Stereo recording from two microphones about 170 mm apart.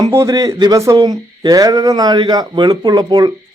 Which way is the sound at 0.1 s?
20° right (ahead or behind).